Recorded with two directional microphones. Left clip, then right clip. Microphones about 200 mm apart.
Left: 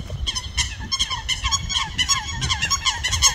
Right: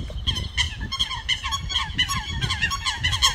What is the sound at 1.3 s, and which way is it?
Fowl, 50° left (ahead or behind).